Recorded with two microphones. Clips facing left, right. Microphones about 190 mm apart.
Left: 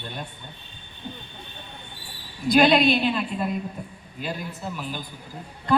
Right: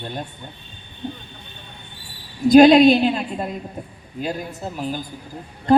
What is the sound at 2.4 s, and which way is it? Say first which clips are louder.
Speech: right 8 dB; 45° right (ahead or behind).